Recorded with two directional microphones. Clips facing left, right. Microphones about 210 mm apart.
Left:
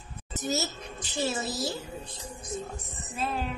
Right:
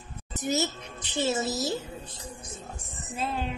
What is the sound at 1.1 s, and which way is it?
Speech, 20° right (ahead or behind).